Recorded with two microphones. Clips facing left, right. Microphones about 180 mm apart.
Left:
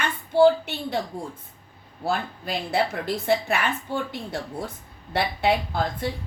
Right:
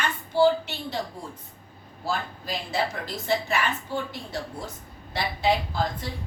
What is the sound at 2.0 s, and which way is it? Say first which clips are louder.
Speech: left 3 dB; 60° left (ahead or behind).